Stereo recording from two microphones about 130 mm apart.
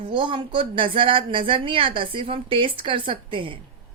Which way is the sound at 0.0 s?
40° right (ahead or behind).